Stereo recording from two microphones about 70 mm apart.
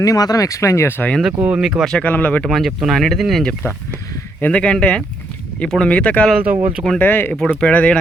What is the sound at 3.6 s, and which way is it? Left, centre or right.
Speech, left.